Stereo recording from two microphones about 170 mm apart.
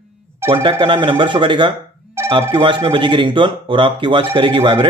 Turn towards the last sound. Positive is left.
turn(degrees=-30)  # may be behind; listen again after turning